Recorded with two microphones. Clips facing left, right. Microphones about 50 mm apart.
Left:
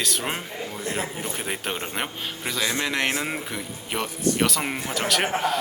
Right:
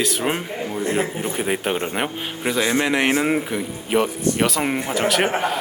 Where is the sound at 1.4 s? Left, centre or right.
Centre.